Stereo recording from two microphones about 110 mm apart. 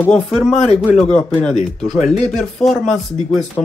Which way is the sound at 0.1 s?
5° left (ahead or behind).